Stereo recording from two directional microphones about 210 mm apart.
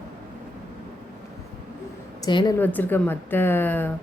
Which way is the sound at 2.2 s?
20° left (ahead or behind).